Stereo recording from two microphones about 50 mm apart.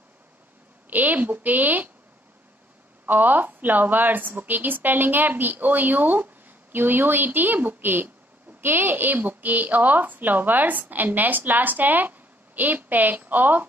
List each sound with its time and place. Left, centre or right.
0.8 s a woman's voice: right
3.1 s a woman's voice: right